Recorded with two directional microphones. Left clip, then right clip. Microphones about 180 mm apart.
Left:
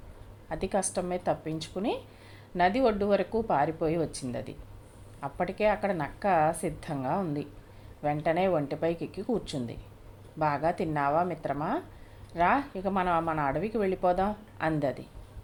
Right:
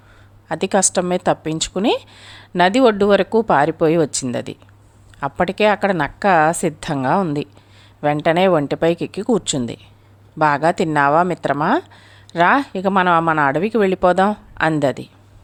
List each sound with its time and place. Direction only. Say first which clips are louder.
0.4 s a woman's voice: right 13 dB; 40° right (ahead or behind)